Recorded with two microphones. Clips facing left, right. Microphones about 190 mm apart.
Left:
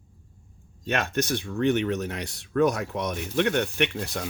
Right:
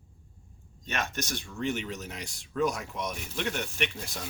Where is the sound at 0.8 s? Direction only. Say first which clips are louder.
Left 8 dB; 60° left (ahead or behind).